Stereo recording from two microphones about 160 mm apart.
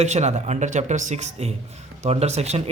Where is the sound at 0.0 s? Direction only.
45° right (ahead or behind).